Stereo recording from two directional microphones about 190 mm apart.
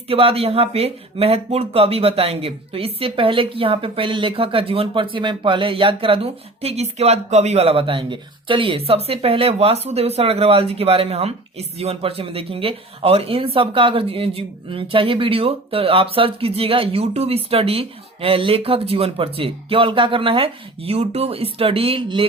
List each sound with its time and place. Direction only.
0.1 s a woman's voice: 30° right (ahead or behind)